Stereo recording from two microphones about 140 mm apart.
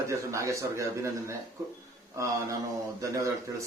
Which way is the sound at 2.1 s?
20° right (ahead or behind).